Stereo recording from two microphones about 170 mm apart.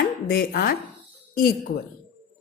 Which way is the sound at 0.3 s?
60° left (ahead or behind).